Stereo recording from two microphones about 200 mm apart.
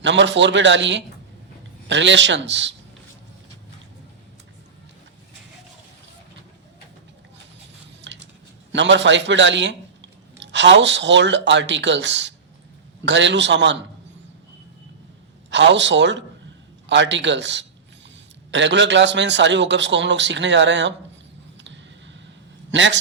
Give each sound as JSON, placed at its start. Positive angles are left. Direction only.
{"t": 0.0, "sound": "a man's voice", "side_deg": -65}
{"t": 8.0, "sound": "a sound", "side_deg": -60}
{"t": 8.7, "sound": "a man's voice", "side_deg": -65}
{"t": 15.4, "sound": "a man's voice", "side_deg": -65}
{"t": 21.6, "sound": "a sound", "side_deg": -65}
{"t": 22.7, "sound": "a man's voice", "side_deg": -65}